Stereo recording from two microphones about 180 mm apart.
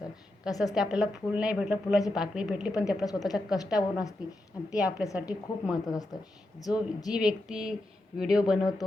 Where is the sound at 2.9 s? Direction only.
20° left (ahead or behind).